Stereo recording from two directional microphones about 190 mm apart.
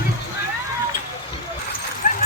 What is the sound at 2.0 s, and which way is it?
Dog, 45° left (ahead or behind).